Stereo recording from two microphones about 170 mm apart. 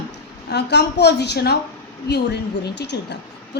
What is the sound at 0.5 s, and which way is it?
A woman's voice, 80° left.